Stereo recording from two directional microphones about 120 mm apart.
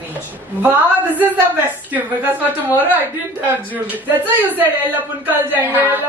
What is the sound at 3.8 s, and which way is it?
A woman's voice, 15° right (ahead or behind).